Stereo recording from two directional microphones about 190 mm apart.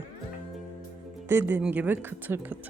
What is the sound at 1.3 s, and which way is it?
Speech, 10° right (ahead or behind).